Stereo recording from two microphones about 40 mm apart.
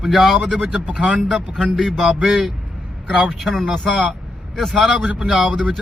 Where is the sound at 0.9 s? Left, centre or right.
Right.